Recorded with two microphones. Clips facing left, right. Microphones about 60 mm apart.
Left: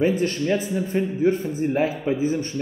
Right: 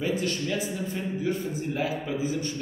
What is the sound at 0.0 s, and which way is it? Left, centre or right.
Speech, left.